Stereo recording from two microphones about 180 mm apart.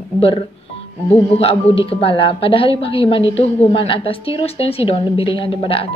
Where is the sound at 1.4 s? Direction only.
30° left (ahead or behind).